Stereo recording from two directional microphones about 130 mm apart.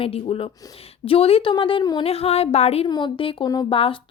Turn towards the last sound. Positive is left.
turn(degrees=45)  # may be behind; listen again after turning